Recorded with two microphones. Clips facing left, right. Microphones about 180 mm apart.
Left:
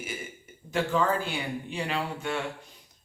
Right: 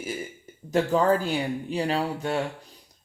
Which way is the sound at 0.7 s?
35° right (ahead or behind).